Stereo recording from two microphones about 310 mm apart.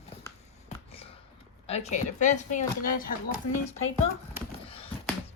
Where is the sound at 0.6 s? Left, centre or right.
Centre.